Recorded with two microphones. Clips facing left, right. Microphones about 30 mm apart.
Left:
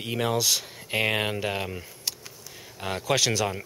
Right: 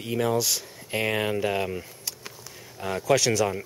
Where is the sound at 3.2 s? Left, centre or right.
Left.